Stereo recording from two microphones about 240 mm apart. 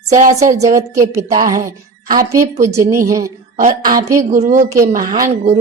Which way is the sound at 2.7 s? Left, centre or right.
Centre.